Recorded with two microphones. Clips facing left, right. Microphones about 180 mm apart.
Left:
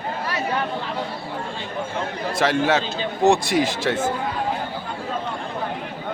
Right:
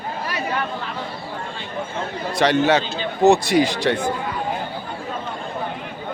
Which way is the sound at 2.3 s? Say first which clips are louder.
Right 3 dB; centre (ahead or behind).